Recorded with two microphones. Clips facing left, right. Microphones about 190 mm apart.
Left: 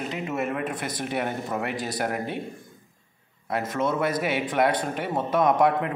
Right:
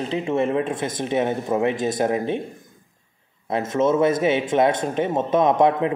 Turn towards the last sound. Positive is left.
turn(degrees=-20)  # may be behind; listen again after turning